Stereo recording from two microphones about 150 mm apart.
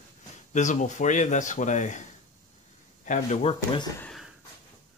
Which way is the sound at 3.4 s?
40° left (ahead or behind).